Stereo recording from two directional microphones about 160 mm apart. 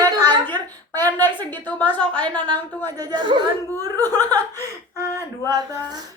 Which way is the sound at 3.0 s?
30° right (ahead or behind).